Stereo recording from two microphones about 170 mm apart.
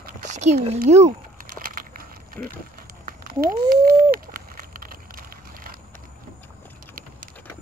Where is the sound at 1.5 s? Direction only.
55° right (ahead or behind).